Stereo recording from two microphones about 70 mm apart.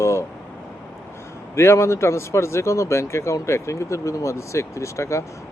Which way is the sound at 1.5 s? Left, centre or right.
Left.